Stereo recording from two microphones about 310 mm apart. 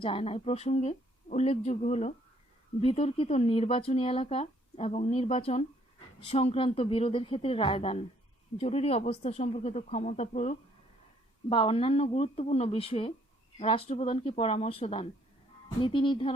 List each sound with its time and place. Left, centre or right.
0.0 s a woman's voice: centre